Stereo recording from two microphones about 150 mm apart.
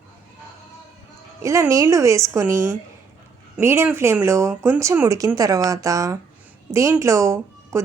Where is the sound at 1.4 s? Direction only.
20° right (ahead or behind).